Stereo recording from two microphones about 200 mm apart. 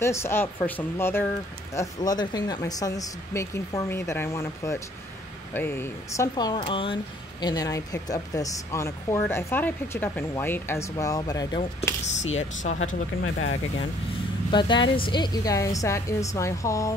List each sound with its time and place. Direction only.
0.0 s speech: 15° left (ahead or behind)
12.4 s speech: 35° left (ahead or behind)
12.8 s speech: 85° left
14.5 s speech: 25° left (ahead or behind)